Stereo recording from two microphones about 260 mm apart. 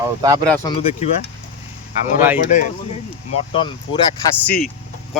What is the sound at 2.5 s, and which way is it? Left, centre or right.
Speech, left.